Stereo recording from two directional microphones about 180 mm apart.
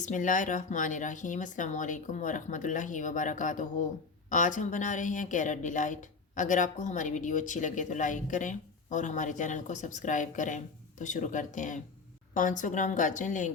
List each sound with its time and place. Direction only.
0.0 s speech: 45° left (ahead or behind)